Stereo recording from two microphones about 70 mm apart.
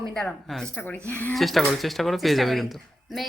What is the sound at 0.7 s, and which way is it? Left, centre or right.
Speech, left.